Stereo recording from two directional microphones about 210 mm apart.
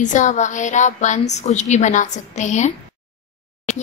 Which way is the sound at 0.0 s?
35° left (ahead or behind).